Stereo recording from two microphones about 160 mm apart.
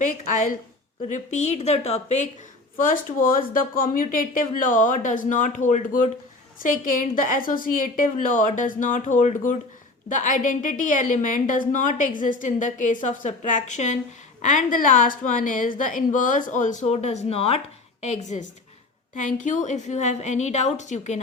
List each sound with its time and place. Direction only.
0.0 s a woman's voice: 55° left (ahead or behind)
2.7 s a woman's voice: 60° left (ahead or behind)